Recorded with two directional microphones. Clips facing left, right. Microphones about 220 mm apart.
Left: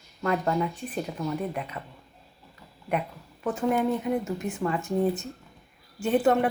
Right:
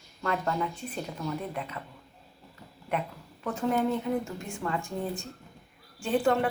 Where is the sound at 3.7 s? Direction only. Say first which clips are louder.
Left 1 dB; 15° left (ahead or behind).